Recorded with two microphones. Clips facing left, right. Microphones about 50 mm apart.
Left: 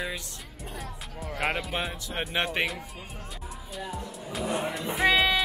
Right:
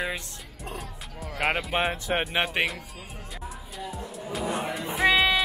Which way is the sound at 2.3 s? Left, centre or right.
Centre.